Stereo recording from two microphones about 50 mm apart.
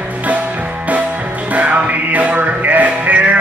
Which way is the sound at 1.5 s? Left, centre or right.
Right.